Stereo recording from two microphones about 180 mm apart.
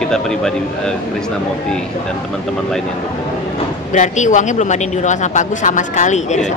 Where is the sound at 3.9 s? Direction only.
40° left (ahead or behind).